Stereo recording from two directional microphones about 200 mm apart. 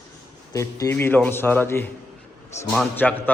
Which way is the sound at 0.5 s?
15° left (ahead or behind).